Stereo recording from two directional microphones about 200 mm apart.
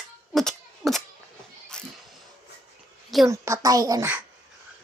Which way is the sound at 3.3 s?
15° right (ahead or behind).